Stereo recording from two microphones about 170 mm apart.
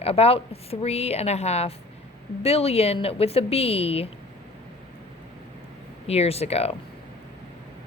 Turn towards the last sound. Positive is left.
turn(degrees=35)  # may be behind; listen again after turning